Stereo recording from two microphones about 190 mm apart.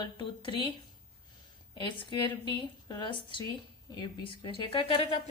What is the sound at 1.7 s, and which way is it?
A woman's voice, 25° left (ahead or behind).